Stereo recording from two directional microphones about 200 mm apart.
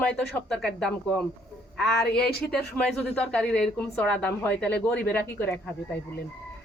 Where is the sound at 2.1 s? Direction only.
55° left (ahead or behind).